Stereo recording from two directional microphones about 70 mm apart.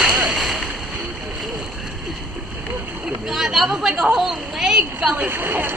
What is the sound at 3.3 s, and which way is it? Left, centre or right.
Chatter, centre.